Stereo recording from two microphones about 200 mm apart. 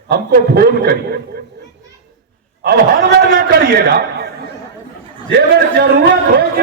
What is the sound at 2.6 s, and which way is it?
A man's voice, 50° right (ahead or behind).